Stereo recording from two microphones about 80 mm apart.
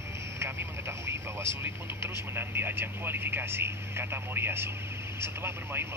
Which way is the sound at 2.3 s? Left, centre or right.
Right.